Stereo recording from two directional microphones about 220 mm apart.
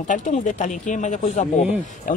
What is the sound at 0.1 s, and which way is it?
Speech, 35° left (ahead or behind).